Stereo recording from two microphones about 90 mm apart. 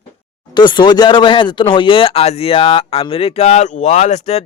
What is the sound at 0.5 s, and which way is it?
Speech, 60° left (ahead or behind).